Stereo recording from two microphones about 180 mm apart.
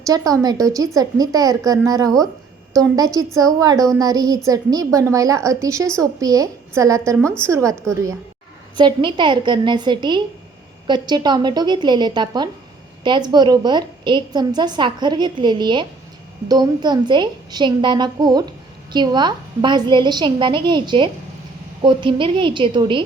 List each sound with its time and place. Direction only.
0.0 s a woman's voice: 20° right (ahead or behind)